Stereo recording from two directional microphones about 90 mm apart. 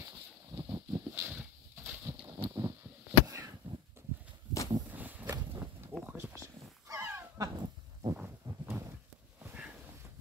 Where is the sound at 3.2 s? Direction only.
40° right (ahead or behind).